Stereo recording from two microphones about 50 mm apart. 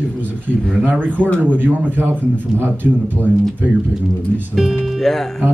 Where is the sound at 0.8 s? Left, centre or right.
Right.